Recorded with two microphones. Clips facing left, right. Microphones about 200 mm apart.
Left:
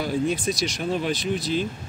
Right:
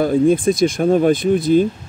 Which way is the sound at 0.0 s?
50° right (ahead or behind).